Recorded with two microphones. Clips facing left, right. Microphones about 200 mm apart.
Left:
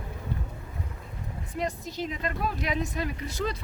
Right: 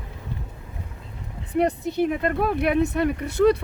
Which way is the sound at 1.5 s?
65° right (ahead or behind).